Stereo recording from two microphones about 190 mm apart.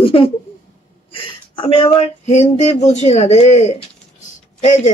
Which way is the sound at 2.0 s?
35° left (ahead or behind).